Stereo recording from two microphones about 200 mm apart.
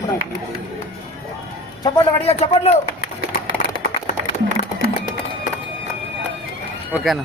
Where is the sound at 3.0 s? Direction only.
40° left (ahead or behind).